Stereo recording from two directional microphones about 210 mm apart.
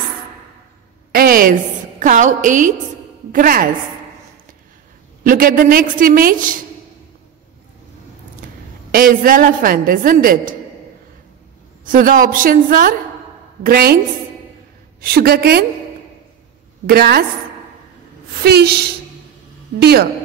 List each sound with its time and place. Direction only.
1.1 s a woman's voice: 45° right (ahead or behind)
5.2 s a woman's voice: 40° right (ahead or behind)
8.9 s a woman's voice: 40° right (ahead or behind)
11.8 s a woman's voice: 40° right (ahead or behind)
15.0 s a woman's voice: 45° right (ahead or behind)
16.8 s a woman's voice: 45° right (ahead or behind)
18.4 s a woman's voice: 50° right (ahead or behind)